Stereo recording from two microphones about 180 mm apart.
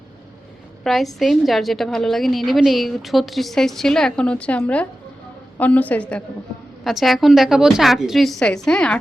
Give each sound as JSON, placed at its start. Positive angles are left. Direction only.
{"t": 0.9, "sound": "a woman's voice", "side_deg": 0}